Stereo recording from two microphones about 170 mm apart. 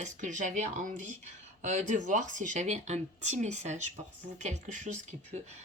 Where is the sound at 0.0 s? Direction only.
45° right (ahead or behind).